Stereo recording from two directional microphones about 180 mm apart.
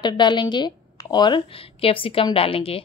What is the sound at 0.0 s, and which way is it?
A woman's voice, 25° left (ahead or behind).